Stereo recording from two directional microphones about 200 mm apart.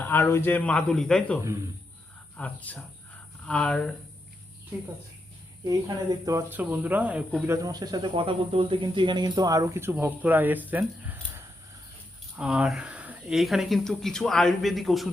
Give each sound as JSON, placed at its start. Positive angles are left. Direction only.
{"t": 0.0, "sound": "a man's voice", "side_deg": 10}
{"t": 5.6, "sound": "speech", "side_deg": -15}